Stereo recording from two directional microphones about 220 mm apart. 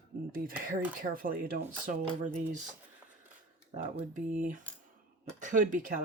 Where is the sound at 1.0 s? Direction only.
40° right (ahead or behind).